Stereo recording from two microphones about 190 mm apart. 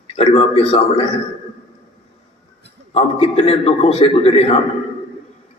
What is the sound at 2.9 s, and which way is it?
A man's voice, 30° left (ahead or behind).